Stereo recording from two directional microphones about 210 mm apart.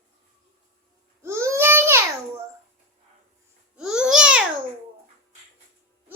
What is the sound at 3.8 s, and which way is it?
Babbling, 5° right (ahead or behind).